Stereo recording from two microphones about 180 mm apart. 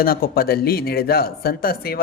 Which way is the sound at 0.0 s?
55° left (ahead or behind).